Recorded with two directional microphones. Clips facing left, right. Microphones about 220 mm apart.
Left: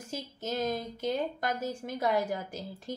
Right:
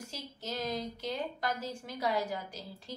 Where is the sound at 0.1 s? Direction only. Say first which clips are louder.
Left 8 dB; 50° left (ahead or behind).